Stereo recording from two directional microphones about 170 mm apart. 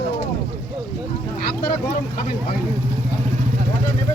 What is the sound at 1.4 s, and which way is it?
Speech, 65° left (ahead or behind).